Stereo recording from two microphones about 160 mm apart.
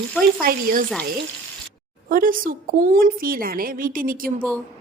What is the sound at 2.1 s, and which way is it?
A woman's voice, 60° right (ahead or behind).